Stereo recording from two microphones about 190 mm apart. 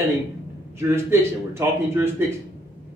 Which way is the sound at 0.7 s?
15° right (ahead or behind).